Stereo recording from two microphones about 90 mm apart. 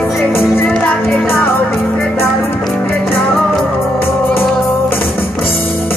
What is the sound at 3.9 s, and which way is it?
Music, 25° left (ahead or behind).